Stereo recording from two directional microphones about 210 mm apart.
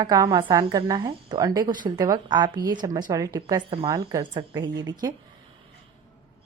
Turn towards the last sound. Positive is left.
turn(degrees=-20)  # may be behind; listen again after turning